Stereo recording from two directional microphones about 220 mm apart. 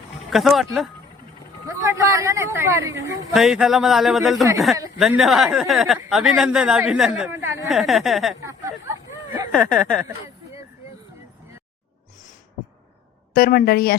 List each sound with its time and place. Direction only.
0.3 s speech: centre (ahead or behind)
1.6 s speech: 15° right (ahead or behind)
3.3 s speech: centre (ahead or behind)
7.7 s speech: centre (ahead or behind)
8.4 s a sound: 15° right (ahead or behind)
9.7 s speech: centre (ahead or behind)
13.3 s a woman's voice: 45° left (ahead or behind)